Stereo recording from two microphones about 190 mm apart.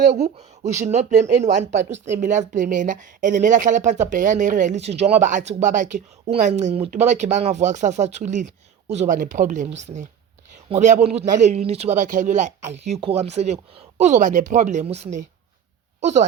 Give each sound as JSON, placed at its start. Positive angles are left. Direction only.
{"t": 0.3, "sound": "speech", "side_deg": -35}